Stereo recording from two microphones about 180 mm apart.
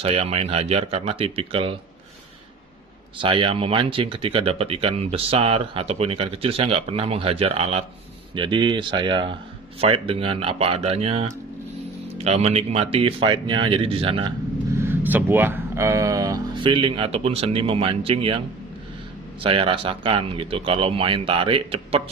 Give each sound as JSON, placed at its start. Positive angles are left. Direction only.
{"t": 0.0, "sound": "speech", "side_deg": -35}
{"t": 3.2, "sound": "speech", "side_deg": -30}
{"t": 14.8, "sound": "speech", "side_deg": -10}
{"t": 19.4, "sound": "speech", "side_deg": -30}